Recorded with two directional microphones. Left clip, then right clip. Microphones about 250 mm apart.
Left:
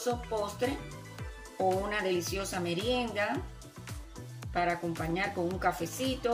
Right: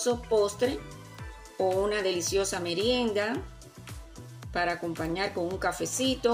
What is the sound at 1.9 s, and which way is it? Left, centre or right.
Speech, right.